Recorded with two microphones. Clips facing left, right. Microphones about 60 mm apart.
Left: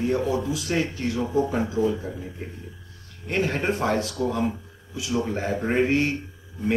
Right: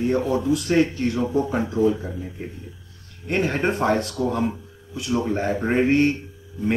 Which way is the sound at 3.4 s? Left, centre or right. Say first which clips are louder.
Right 2 dB; centre.